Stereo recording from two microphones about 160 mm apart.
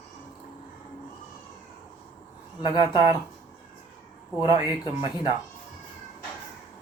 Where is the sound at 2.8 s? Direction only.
20° right (ahead or behind).